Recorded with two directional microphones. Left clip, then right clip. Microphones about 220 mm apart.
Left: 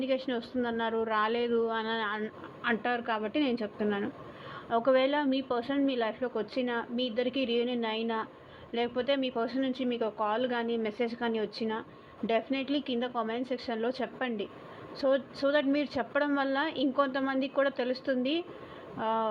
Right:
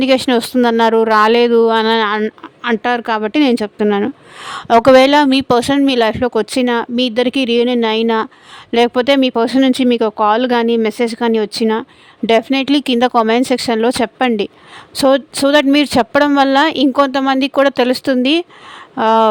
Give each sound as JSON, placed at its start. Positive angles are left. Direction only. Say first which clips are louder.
{"t": 0.0, "sound": "speech", "louder": "right 19 dB", "side_deg": -75}